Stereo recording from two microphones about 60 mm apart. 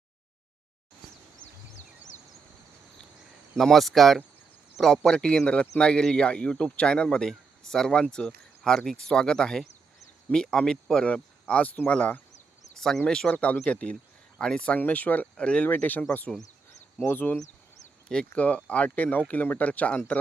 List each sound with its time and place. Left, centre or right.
3.6 s speech: centre; by 12.2 s left
12.7 s speech: centre
13.3 s speech: left
14.8 s speech: left
15.7 s speech: left
17.1 s speech: left
18.3 s speech: left